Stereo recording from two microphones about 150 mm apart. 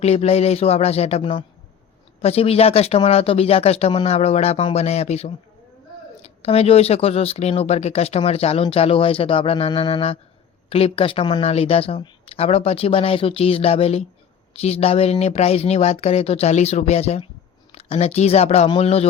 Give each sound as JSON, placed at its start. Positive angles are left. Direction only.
{"t": 0.0, "sound": "speech", "side_deg": 45}